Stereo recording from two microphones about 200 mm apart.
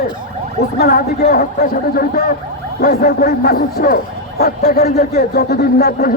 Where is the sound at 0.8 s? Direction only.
50° left (ahead or behind).